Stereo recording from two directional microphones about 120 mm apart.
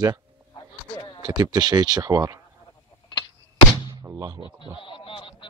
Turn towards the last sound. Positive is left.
turn(degrees=45)  # may be behind; listen again after turning